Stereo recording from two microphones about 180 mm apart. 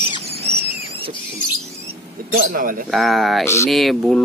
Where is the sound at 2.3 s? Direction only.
55° right (ahead or behind).